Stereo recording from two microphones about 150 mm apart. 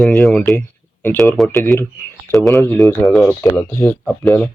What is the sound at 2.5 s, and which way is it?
Speech, 15° left (ahead or behind).